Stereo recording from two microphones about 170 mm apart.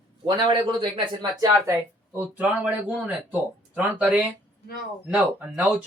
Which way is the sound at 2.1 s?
10° right (ahead or behind).